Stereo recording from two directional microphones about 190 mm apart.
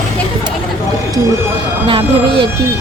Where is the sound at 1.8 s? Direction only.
25° right (ahead or behind).